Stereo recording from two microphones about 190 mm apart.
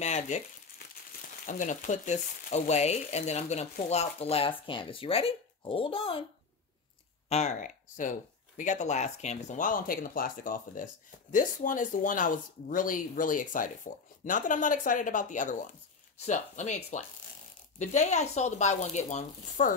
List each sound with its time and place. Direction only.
0.0 s speech: 35° left (ahead or behind)
1.4 s speech: 40° left (ahead or behind)
7.2 s speech: 35° left (ahead or behind)